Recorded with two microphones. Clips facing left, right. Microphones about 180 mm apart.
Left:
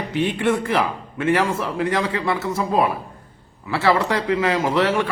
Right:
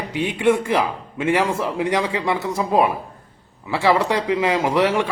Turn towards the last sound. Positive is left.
turn(degrees=-15)  # may be behind; listen again after turning